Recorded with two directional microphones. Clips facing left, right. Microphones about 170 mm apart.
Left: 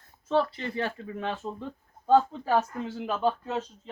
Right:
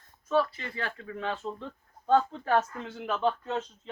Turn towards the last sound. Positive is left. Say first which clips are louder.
# left 1 dB
turn(degrees=5)  # may be behind; listen again after turning